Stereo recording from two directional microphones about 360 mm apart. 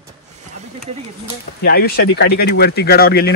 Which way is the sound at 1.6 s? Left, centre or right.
Left.